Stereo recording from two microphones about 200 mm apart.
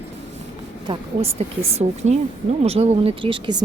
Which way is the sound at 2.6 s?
30° right (ahead or behind).